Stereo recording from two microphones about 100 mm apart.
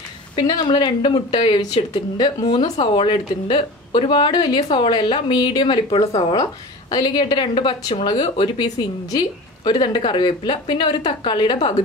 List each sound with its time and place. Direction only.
0.4 s a woman's voice: 50° left (ahead or behind)
6.3 s a woman's voice: 40° left (ahead or behind); by 11.8 s 60° left (ahead or behind)